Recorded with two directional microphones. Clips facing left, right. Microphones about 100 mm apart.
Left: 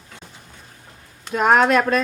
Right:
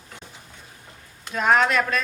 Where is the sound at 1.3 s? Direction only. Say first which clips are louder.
Left 4 dB; 40° left (ahead or behind).